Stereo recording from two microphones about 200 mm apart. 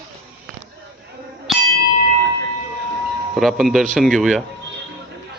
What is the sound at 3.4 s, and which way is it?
Speech, centre (ahead or behind).